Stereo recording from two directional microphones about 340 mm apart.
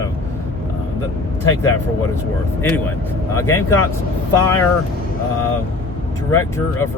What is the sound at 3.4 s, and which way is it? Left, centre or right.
Speech, centre.